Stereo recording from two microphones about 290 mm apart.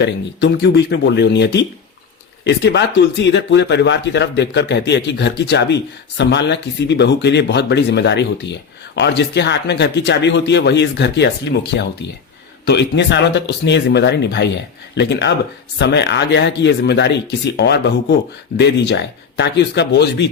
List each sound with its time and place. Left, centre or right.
0.0 s speech: left